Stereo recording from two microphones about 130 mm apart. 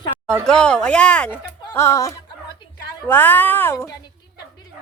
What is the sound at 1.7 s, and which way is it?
Speech, 25° left (ahead or behind).